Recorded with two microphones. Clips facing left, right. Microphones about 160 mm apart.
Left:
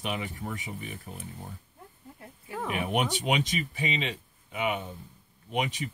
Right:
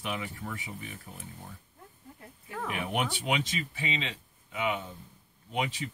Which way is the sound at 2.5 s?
20° left (ahead or behind).